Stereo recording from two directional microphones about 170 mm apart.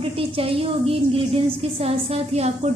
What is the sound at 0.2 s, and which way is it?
A woman's voice, 35° right (ahead or behind).